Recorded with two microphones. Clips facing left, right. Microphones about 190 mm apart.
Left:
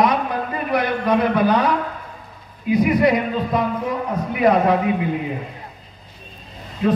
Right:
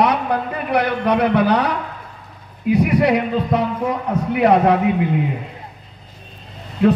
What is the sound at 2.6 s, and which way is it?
A man's voice, 70° right (ahead or behind).